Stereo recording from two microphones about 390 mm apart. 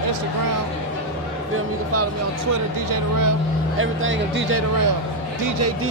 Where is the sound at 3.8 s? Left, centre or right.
Right.